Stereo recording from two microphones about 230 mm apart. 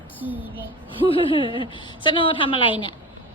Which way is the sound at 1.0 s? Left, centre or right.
Left.